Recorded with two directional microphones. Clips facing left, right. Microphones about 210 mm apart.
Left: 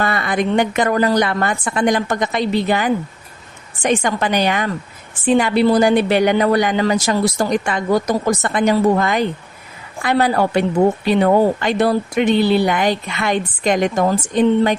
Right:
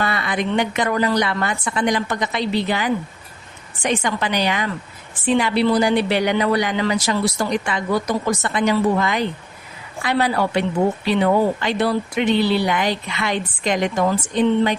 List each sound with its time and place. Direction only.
0.0 s speech: 45° left (ahead or behind)